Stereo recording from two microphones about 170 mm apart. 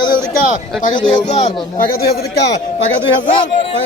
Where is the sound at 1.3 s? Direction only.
40° left (ahead or behind).